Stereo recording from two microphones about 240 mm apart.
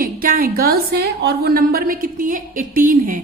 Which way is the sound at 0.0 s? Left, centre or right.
Right.